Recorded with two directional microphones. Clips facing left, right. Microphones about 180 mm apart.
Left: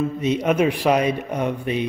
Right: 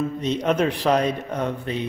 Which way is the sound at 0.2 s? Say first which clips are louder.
Left 3 dB; 10° left (ahead or behind).